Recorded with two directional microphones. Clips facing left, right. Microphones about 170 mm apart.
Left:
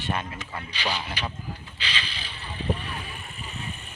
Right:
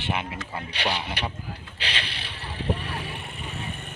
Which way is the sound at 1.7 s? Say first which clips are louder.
Right 2 dB; 65° right (ahead or behind).